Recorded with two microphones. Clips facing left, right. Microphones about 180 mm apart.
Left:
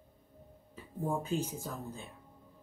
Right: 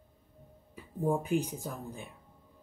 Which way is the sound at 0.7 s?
15° right (ahead or behind).